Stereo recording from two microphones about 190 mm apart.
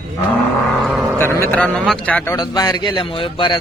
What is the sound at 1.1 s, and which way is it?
Speech, 10° left (ahead or behind).